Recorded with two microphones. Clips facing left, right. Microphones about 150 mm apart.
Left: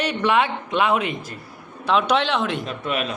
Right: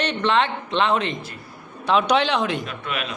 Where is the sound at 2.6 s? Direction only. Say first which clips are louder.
Left 4 dB; 40° left (ahead or behind).